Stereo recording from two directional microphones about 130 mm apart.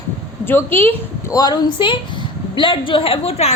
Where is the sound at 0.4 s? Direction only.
15° left (ahead or behind).